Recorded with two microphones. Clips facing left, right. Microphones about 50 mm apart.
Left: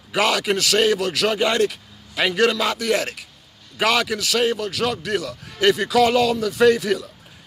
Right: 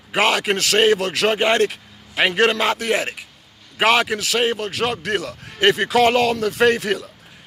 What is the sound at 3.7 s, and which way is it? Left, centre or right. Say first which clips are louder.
Speech: right 3 dB; right.